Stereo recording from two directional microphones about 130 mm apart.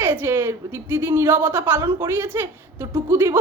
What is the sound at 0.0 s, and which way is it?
A woman's voice, 15° right (ahead or behind).